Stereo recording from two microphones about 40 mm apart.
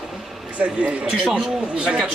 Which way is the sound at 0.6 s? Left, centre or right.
Right.